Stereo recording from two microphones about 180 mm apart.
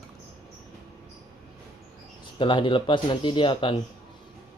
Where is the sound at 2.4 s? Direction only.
30° left (ahead or behind).